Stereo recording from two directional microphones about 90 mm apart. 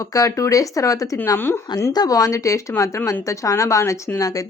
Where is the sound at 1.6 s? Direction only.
50° left (ahead or behind).